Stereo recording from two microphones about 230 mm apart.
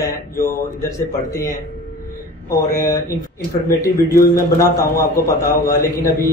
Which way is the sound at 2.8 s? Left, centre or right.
Centre.